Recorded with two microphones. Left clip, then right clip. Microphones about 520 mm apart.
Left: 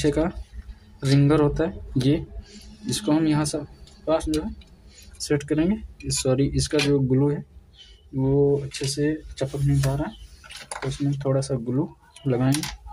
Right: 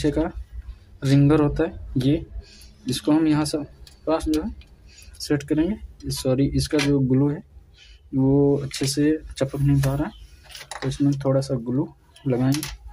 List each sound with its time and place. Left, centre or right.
0.0 s speech: right